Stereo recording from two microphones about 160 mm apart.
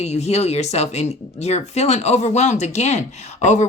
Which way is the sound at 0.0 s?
45° left (ahead or behind).